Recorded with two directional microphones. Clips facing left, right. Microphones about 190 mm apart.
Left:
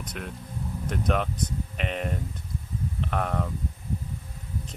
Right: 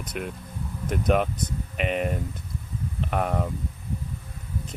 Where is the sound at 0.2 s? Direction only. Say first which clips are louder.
Right 4 dB; 10° right (ahead or behind).